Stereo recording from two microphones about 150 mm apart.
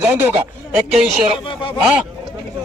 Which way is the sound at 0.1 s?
10° right (ahead or behind).